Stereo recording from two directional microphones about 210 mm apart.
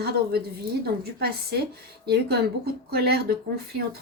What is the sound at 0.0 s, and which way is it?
Speech, 50° right (ahead or behind).